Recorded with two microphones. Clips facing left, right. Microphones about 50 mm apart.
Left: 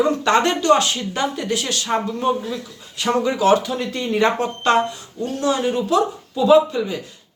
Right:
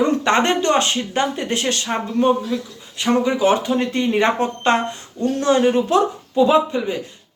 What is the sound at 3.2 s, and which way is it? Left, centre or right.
Speech, right.